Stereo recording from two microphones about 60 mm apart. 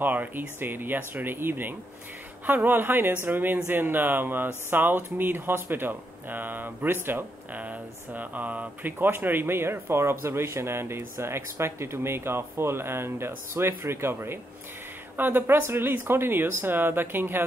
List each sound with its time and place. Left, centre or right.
0.0 s speech: right
7.5 s a sound: right
8.9 s speech: right